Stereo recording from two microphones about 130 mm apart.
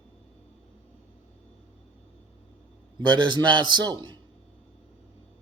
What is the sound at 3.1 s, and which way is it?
A man's voice, 35° right (ahead or behind).